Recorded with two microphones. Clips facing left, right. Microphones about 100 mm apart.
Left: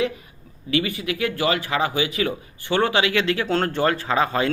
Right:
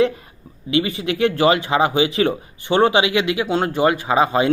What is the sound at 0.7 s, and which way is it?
Speech, 25° right (ahead or behind).